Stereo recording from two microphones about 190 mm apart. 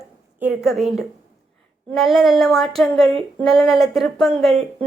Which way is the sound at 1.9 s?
Centre (ahead or behind).